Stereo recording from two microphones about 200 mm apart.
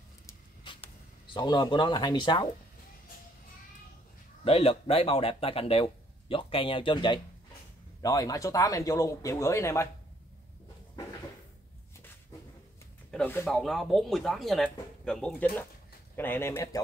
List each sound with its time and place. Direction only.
0.3 s a sound: 25° left (ahead or behind)
1.3 s speech: 20° left (ahead or behind)
4.5 s speech: 30° left (ahead or behind)
13.1 s speech: 10° left (ahead or behind)